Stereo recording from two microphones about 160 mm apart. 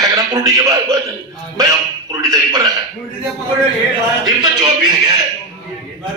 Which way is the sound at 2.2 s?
20° right (ahead or behind).